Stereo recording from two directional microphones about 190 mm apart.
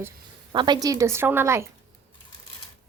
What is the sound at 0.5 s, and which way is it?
Speech, 25° right (ahead or behind).